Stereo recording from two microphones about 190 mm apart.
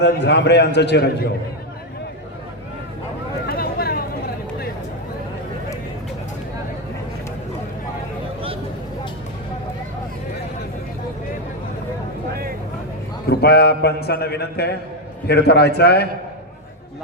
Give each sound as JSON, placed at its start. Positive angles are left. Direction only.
{"t": 0.0, "sound": "a man's voice", "side_deg": 65}
{"t": 3.4, "sound": "vehicle", "side_deg": 55}
{"t": 13.2, "sound": "a man's voice", "side_deg": 55}